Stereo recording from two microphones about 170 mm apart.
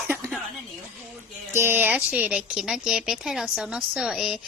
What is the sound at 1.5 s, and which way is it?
A woman's voice, 15° right (ahead or behind).